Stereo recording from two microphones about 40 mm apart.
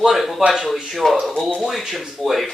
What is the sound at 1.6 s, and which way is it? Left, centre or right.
Speech, centre.